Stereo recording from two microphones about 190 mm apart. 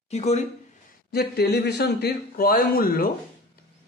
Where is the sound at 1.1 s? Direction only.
55° left (ahead or behind).